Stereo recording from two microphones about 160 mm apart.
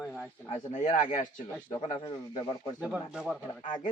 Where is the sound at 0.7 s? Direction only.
50° left (ahead or behind).